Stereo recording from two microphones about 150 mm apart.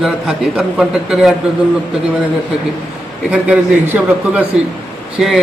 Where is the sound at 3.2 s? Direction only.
10° right (ahead or behind).